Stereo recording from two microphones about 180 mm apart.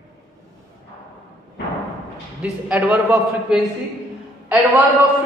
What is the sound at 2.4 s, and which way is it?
A man's voice, 5° right (ahead or behind).